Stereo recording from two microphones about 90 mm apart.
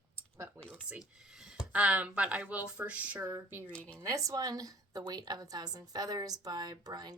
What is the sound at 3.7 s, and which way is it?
Speech, 15° left (ahead or behind).